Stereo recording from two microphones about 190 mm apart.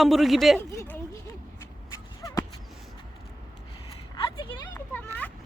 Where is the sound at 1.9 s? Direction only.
15° left (ahead or behind).